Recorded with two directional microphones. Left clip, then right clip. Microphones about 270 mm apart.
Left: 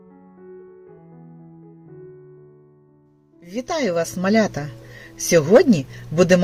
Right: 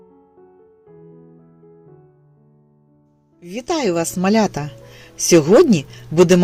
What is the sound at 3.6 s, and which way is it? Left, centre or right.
Speech, right.